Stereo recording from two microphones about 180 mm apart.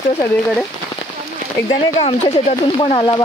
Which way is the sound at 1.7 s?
30° left (ahead or behind).